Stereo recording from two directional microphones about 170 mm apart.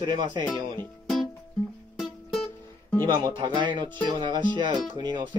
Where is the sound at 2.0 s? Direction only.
Centre (ahead or behind).